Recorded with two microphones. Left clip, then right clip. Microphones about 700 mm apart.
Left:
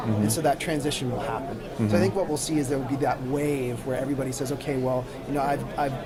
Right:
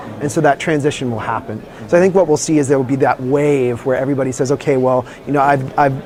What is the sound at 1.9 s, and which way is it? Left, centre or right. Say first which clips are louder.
Speech: right 14 dB; right.